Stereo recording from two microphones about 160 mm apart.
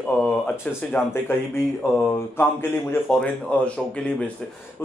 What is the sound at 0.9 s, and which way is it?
A man's voice, 15° left (ahead or behind).